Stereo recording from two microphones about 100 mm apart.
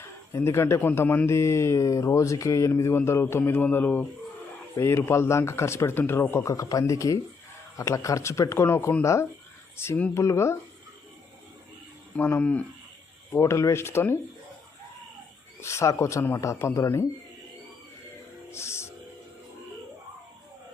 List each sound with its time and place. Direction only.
0.0 s speech: 25° left (ahead or behind)
12.1 s speech: 15° left (ahead or behind)
13.3 s speech: 25° left (ahead or behind)
15.6 s speech: 30° left (ahead or behind)
18.5 s music: 25° left (ahead or behind)